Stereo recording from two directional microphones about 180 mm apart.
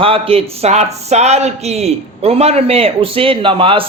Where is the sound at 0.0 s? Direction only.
30° right (ahead or behind).